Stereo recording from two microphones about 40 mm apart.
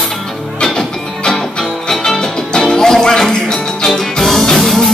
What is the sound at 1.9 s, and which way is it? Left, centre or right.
Music, centre.